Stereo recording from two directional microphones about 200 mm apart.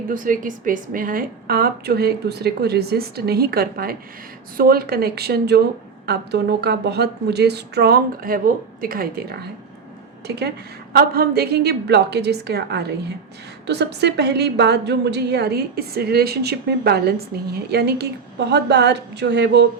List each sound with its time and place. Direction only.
0.1 s a woman's voice: 40° right (ahead or behind); by 19.6 s 60° right (ahead or behind)